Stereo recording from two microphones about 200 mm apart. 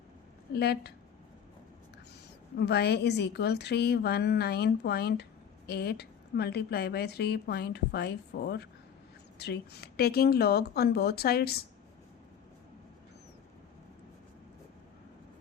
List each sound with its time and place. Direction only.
0.5 s a woman's voice: 55° left (ahead or behind)
2.6 s a woman's voice: 55° left (ahead or behind)